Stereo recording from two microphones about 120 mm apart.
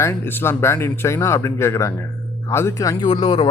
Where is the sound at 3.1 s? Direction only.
40° left (ahead or behind).